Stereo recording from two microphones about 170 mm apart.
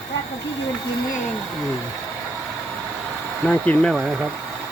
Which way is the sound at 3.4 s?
10° left (ahead or behind).